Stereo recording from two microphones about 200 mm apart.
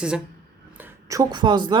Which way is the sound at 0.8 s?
15° right (ahead or behind).